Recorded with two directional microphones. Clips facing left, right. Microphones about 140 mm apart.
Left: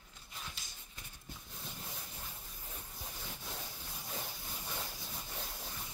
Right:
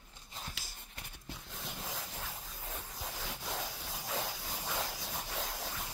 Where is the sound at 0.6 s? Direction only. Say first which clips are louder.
Right 4 dB; 80° right.